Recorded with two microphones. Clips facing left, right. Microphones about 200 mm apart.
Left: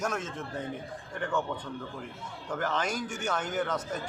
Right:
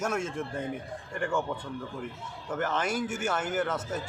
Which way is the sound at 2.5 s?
5° right (ahead or behind).